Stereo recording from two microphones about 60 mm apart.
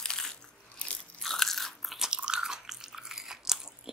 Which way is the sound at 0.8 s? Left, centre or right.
Left.